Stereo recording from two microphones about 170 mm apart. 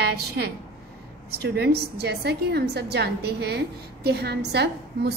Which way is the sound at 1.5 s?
75° right (ahead or behind).